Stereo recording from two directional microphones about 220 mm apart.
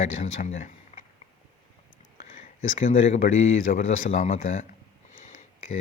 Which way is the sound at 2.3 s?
35° left (ahead or behind).